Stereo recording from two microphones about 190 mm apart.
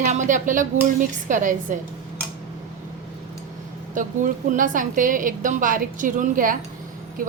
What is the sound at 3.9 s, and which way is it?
A woman's voice, 45° right (ahead or behind).